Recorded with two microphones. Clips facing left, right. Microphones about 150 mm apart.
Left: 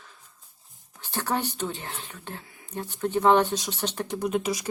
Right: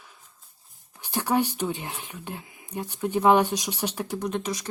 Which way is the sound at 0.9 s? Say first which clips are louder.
Right 3 dB; 15° right (ahead or behind).